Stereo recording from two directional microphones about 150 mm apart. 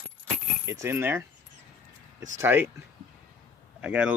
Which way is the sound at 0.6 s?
20° right (ahead or behind).